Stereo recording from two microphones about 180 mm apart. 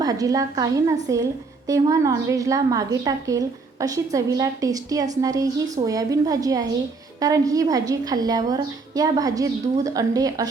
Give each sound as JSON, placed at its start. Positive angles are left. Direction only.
{"t": 0.0, "sound": "a woman's voice", "side_deg": -20}